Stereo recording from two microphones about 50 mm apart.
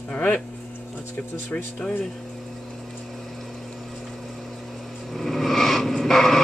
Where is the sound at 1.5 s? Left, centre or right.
Left.